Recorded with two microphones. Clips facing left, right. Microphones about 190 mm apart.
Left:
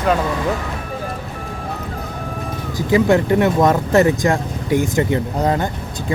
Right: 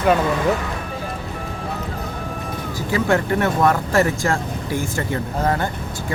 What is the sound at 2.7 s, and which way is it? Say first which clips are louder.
Speech: left 5 dB; 20° left (ahead or behind).